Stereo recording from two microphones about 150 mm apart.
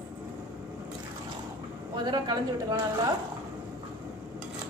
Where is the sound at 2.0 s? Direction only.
30° right (ahead or behind).